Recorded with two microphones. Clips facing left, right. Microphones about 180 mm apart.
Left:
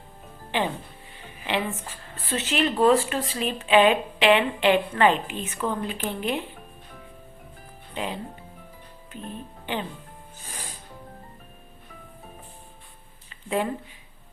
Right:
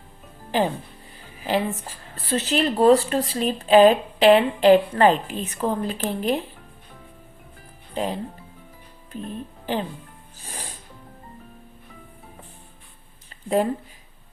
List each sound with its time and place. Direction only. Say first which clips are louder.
0.5 s speech: right 4 dB; 40° right (ahead or behind)
7.9 s speech: right 5 dB; 40° right (ahead or behind)